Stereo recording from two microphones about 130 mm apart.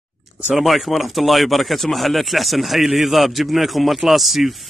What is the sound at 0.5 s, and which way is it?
Speech, centre (ahead or behind).